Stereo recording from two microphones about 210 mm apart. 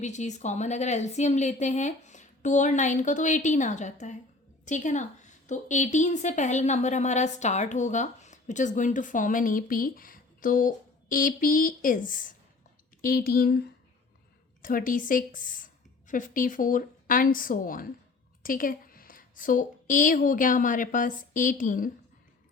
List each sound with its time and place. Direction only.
0.0 s a woman's voice: 35° left (ahead or behind)